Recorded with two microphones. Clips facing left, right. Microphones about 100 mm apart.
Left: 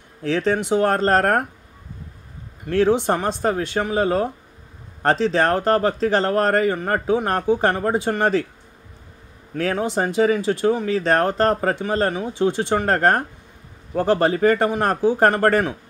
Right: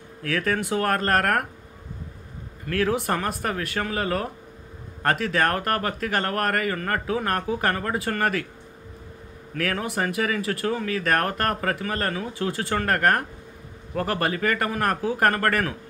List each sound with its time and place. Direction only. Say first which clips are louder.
0.2 s speech: left 5 dB; 25° left (ahead or behind)
2.6 s speech: left 6 dB; 25° left (ahead or behind)
9.6 s speech: left 5 dB; 25° left (ahead or behind)